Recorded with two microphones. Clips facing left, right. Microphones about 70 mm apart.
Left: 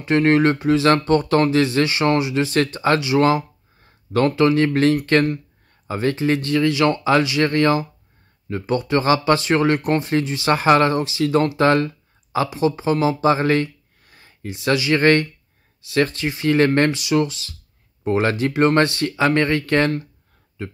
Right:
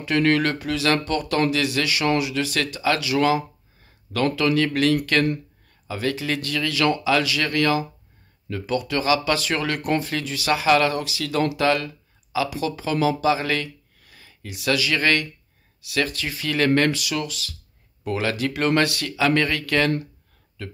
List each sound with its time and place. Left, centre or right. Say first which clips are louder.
0.0 s speech: left 4 dB; left